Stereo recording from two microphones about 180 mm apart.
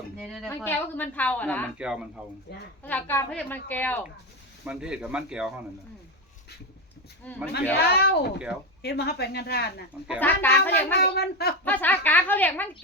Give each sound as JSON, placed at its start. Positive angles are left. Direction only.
{"t": 0.2, "sound": "a woman's voice", "side_deg": 0}
{"t": 1.8, "sound": "speech", "side_deg": -5}
{"t": 2.8, "sound": "a woman's voice", "side_deg": 10}
{"t": 4.6, "sound": "speech", "side_deg": -5}
{"t": 7.2, "sound": "a woman's voice", "side_deg": 10}
{"t": 7.9, "sound": "speech", "side_deg": 60}
{"t": 10.2, "sound": "a woman's voice", "side_deg": 10}
{"t": 10.9, "sound": "speech", "side_deg": 65}
{"t": 11.6, "sound": "a woman's voice", "side_deg": 10}